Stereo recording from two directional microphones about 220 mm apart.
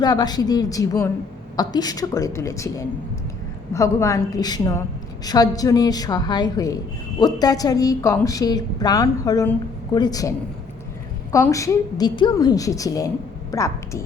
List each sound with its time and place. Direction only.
0.0 s a woman's voice: 20° left (ahead or behind)